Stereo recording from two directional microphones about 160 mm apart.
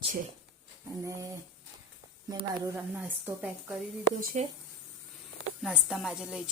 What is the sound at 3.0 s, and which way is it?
Speech, 10° right (ahead or behind).